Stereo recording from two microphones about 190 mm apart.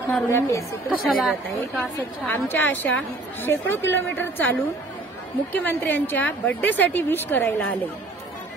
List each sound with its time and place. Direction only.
0.1 s a woman's voice: 15° left (ahead or behind)
0.8 s a woman's voice: 5° right (ahead or behind)
2.2 s a woman's voice: 10° left (ahead or behind)